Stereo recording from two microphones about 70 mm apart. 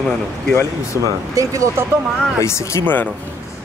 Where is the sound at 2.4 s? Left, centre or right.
Left.